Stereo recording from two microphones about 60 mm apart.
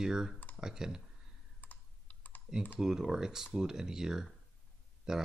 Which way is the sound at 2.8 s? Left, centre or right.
Centre.